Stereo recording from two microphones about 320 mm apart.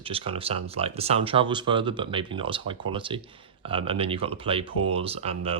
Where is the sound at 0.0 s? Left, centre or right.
Centre.